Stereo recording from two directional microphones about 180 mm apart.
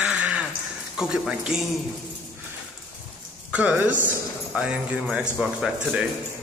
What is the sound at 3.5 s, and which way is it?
A man's voice, 10° right (ahead or behind).